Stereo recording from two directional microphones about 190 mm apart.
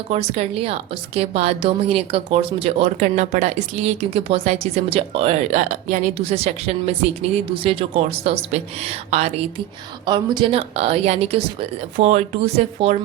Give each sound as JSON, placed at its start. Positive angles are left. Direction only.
{"t": 0.1, "sound": "a woman's voice", "side_deg": -35}